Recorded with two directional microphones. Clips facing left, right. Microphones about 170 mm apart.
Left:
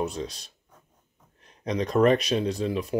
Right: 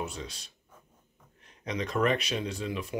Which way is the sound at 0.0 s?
35° left (ahead or behind).